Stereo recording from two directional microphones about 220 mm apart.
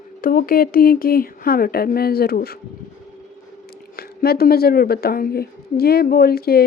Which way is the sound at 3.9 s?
45° left (ahead or behind).